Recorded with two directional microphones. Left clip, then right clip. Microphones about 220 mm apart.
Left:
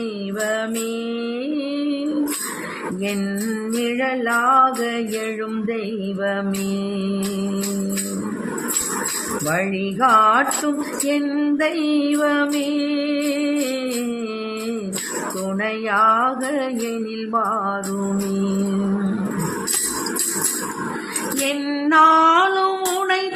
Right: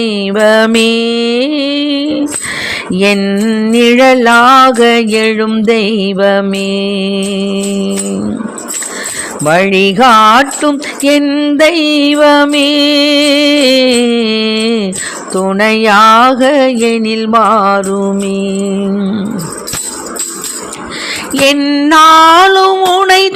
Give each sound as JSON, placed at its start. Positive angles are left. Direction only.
{"t": 0.0, "sound": "music", "side_deg": -45}
{"t": 3.2, "sound": "music", "side_deg": -35}
{"t": 3.8, "sound": "music", "side_deg": -50}
{"t": 9.5, "sound": "music", "side_deg": -50}
{"t": 11.6, "sound": "music", "side_deg": -40}
{"t": 21.6, "sound": "music", "side_deg": -35}
{"t": 21.8, "sound": "music", "side_deg": -45}